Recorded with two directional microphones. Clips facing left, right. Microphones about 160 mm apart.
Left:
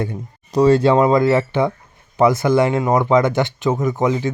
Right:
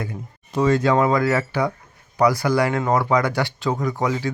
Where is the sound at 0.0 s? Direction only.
35° left (ahead or behind).